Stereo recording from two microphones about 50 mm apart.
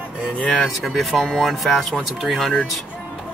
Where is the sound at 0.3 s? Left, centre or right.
Left.